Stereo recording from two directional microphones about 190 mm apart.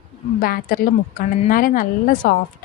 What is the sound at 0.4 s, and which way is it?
A woman's voice, 50° left (ahead or behind).